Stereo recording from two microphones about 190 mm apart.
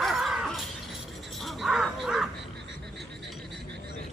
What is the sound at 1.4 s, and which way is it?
Crow, centre (ahead or behind).